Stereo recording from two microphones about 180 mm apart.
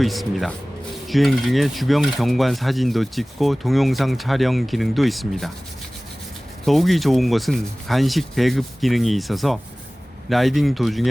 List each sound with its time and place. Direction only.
0.0 s speech: centre (ahead or behind)
6.7 s speech: centre (ahead or behind)